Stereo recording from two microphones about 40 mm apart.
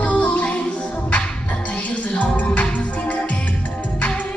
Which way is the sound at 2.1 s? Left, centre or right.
Left.